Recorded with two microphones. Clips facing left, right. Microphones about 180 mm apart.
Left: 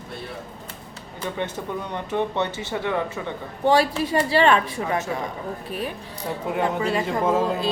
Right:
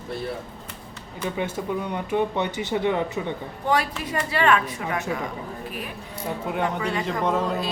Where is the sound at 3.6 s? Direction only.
30° left (ahead or behind).